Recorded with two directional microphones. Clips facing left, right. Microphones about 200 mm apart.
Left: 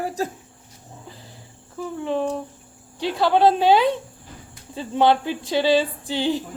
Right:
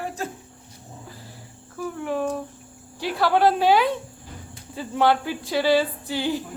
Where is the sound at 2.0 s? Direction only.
25° left (ahead or behind).